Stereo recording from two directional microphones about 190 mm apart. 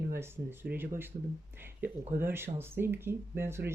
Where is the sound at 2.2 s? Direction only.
10° right (ahead or behind).